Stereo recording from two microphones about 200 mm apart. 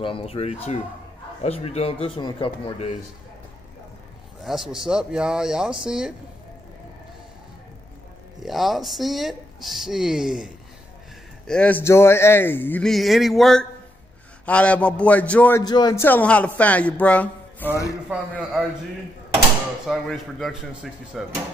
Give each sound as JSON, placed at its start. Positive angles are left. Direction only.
{"t": 0.0, "sound": "speech", "side_deg": 30}
{"t": 4.5, "sound": "speech", "side_deg": 0}
{"t": 8.4, "sound": "a man's voice", "side_deg": 0}
{"t": 15.6, "sound": "a man's voice", "side_deg": 20}
{"t": 19.9, "sound": "speech", "side_deg": 0}